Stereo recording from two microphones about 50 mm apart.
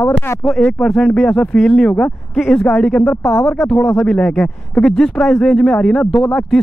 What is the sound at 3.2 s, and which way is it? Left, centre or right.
Speech, left.